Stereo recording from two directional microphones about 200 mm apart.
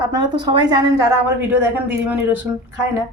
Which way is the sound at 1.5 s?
10° right (ahead or behind).